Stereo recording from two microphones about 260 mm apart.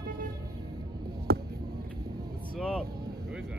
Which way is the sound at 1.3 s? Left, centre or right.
Right.